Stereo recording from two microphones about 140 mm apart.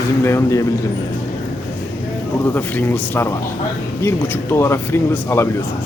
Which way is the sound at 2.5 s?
15° left (ahead or behind).